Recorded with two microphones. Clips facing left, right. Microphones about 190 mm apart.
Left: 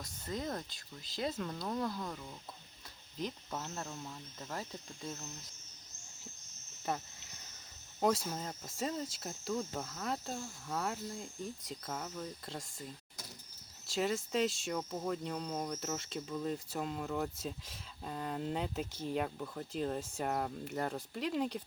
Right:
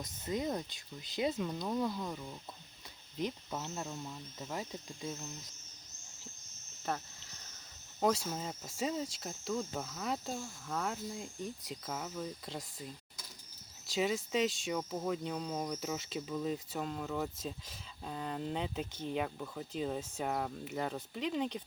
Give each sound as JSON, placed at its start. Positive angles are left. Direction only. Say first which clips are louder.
{"t": 0.0, "sound": "speech", "louder": "right 4 dB", "side_deg": -20}
{"t": 1.1, "sound": "speech", "louder": "right 3 dB", "side_deg": 0}
{"t": 6.9, "sound": "speech", "louder": "even", "side_deg": 5}
{"t": 8.0, "sound": "speech", "louder": "even", "side_deg": 0}